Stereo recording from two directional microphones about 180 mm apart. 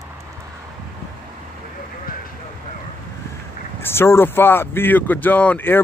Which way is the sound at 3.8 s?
15° left (ahead or behind).